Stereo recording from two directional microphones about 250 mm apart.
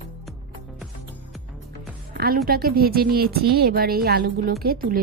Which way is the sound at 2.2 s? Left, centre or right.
Right.